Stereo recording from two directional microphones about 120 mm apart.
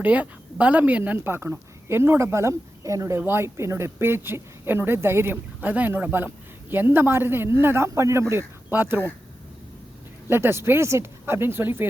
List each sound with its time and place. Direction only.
0.0 s speech: 10° right (ahead or behind)
10.2 s speech: 20° right (ahead or behind)